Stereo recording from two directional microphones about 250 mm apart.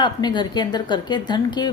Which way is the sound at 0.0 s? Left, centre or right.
Centre.